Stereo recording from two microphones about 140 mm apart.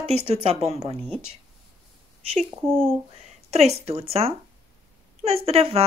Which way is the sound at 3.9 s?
45° right (ahead or behind).